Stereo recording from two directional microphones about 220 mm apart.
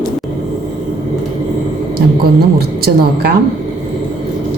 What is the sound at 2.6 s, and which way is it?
Speech, 45° right (ahead or behind).